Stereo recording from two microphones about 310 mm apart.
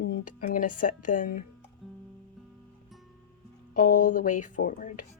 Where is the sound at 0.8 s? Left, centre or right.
Left.